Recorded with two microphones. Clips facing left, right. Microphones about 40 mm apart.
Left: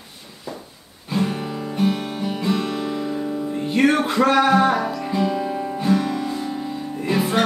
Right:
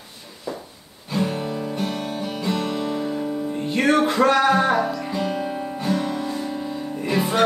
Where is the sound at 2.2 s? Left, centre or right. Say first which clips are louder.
Left 4 dB; centre.